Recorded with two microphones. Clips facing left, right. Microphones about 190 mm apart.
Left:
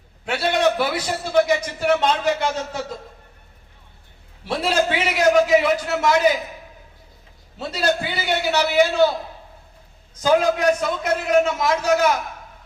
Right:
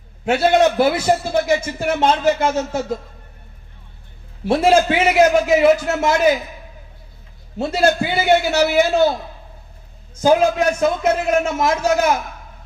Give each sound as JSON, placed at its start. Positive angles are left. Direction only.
{"t": 0.6, "sound": "a man's voice", "side_deg": -45}
{"t": 4.4, "sound": "a man's voice", "side_deg": -50}
{"t": 7.6, "sound": "a man's voice", "side_deg": -50}
{"t": 10.2, "sound": "a man's voice", "side_deg": -45}